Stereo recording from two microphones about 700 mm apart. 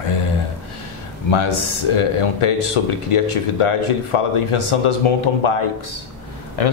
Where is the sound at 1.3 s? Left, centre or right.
Left.